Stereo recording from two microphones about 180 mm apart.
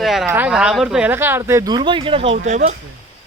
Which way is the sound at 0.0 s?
Centre (ahead or behind).